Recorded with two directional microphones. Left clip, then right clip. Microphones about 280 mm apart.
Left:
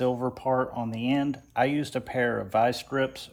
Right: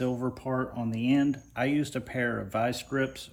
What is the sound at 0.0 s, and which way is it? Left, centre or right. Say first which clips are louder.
Speech: left 5 dB; centre.